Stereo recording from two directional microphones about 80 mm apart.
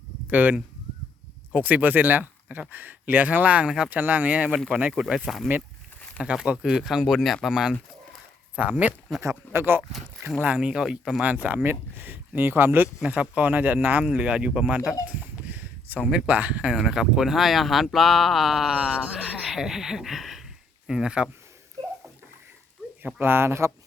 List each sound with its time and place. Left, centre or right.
0.3 s speech: right
4.9 s speech: centre
6.2 s speech: centre
8.5 s speech: centre
9.5 s speech: right
10.4 s speech: centre
11.4 s speech: right
13.0 s speech: centre
15.0 s a sound: centre
16.2 s speech: centre
23.2 s speech: right